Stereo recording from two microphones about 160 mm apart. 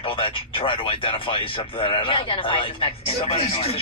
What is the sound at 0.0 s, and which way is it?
Speech, 35° left (ahead or behind).